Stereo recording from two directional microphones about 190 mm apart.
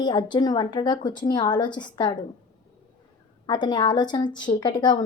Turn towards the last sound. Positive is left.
turn(degrees=25)  # may be behind; listen again after turning